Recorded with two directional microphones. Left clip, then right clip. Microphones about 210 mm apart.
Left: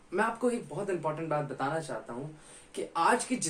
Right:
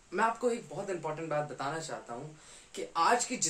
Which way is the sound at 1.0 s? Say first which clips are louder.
Left 5 dB; centre (ahead or behind).